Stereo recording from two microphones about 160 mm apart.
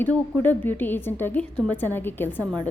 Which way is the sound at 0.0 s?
10° left (ahead or behind).